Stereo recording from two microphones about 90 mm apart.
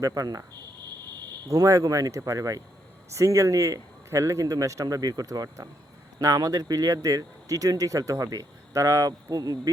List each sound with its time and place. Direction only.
0.0 s speech: 45° right (ahead or behind)
1.5 s speech: 40° right (ahead or behind)